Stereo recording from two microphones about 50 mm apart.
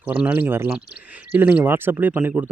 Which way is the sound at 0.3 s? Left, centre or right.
Right.